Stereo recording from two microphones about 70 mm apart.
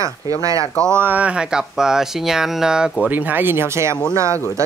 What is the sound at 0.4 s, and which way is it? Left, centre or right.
Speech, right.